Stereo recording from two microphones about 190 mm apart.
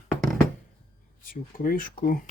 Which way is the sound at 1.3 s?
50° left (ahead or behind).